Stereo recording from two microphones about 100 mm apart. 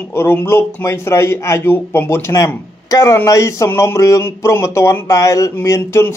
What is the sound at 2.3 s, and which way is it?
Speech, 35° left (ahead or behind).